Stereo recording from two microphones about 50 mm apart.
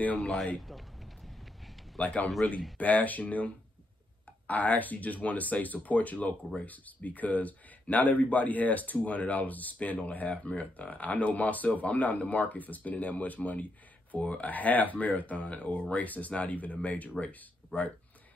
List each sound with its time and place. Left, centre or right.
0.2 s speech: centre
0.6 s a sound: centre
2.0 s a man's voice: left